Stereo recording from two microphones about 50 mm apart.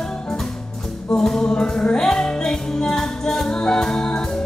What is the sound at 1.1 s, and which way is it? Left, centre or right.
Music, centre.